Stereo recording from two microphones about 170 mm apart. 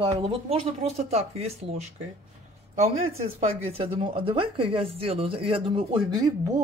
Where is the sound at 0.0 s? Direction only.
30° right (ahead or behind).